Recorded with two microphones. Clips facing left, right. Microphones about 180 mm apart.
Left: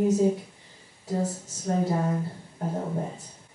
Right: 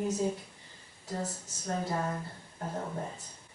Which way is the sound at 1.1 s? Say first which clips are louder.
Left 8 dB; 10° left (ahead or behind).